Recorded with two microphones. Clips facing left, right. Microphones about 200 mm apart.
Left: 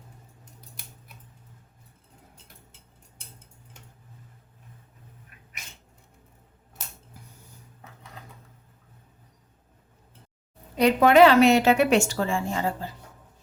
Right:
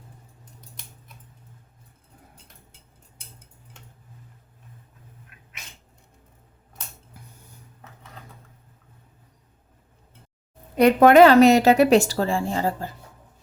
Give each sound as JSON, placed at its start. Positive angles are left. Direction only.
{"t": 10.8, "sound": "a woman's voice", "side_deg": -50}